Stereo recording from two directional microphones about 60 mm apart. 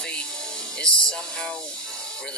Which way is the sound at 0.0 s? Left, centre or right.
Centre.